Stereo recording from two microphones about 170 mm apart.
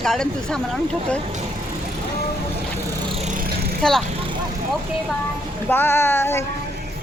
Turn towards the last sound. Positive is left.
turn(degrees=15)  # may be behind; listen again after turning